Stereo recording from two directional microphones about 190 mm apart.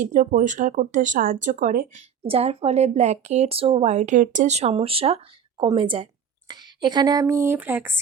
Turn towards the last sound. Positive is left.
turn(degrees=-10)  # may be behind; listen again after turning